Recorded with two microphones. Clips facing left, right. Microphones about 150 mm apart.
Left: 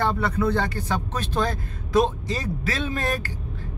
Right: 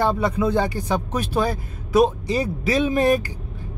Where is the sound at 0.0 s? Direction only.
15° right (ahead or behind).